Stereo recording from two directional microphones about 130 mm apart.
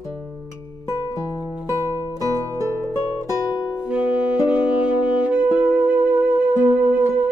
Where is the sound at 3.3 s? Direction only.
30° left (ahead or behind).